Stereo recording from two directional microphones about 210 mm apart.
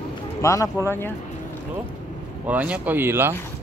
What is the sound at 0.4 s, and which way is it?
Speech, 15° left (ahead or behind).